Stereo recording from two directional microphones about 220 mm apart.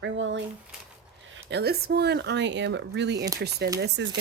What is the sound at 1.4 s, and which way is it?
Speech, 50° right (ahead or behind).